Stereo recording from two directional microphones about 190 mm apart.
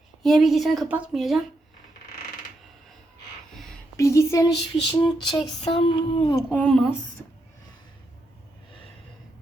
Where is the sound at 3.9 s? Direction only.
15° left (ahead or behind).